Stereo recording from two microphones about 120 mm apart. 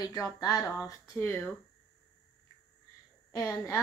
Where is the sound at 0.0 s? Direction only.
35° left (ahead or behind).